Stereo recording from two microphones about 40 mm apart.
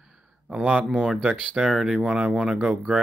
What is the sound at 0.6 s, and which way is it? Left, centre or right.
Speech, right.